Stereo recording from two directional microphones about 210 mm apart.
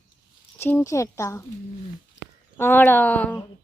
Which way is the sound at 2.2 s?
55° left (ahead or behind).